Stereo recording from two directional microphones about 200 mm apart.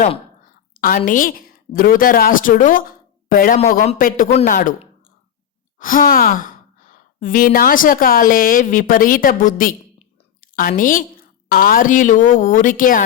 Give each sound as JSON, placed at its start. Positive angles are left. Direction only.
{"t": 0.8, "sound": "a woman's voice", "side_deg": 45}
{"t": 5.8, "sound": "a woman's voice", "side_deg": 45}